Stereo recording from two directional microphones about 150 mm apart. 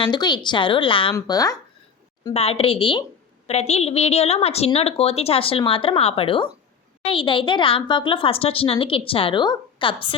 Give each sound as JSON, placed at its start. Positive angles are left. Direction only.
{"t": 0.0, "sound": "a woman's voice", "side_deg": 30}
{"t": 1.1, "sound": "speech", "side_deg": 25}
{"t": 2.3, "sound": "a woman's voice", "side_deg": 40}